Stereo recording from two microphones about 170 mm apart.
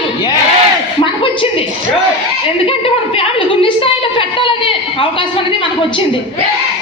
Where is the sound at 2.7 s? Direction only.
35° left (ahead or behind).